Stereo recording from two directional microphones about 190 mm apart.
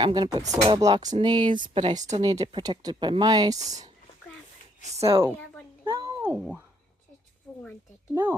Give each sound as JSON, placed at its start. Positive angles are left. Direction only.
{"t": 0.0, "sound": "speech", "side_deg": -20}
{"t": 1.7, "sound": "a woman's voice", "side_deg": -35}
{"t": 2.4, "sound": "speech", "side_deg": -20}
{"t": 4.9, "sound": "speech", "side_deg": -30}
{"t": 5.8, "sound": "a sound", "side_deg": -15}
{"t": 6.3, "sound": "speech", "side_deg": 0}
{"t": 7.5, "sound": "a sound", "side_deg": 5}
{"t": 8.1, "sound": "speech", "side_deg": -10}